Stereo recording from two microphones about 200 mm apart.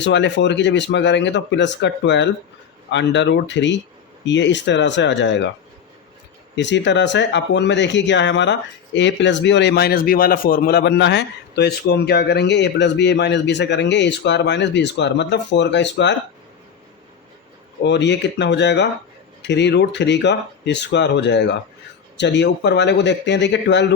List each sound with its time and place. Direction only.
0.0 s speech: 65° left (ahead or behind)
6.6 s speech: 60° left (ahead or behind)
17.8 s speech: 60° left (ahead or behind)